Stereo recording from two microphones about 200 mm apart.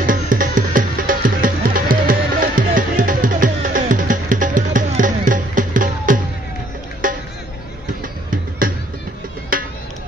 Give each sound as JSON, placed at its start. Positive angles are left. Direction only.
{"t": 0.0, "sound": "music", "side_deg": -45}
{"t": 8.6, "sound": "music", "side_deg": -45}